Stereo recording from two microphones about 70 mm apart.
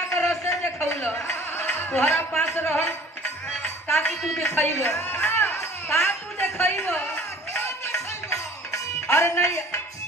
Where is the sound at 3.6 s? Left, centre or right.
Left.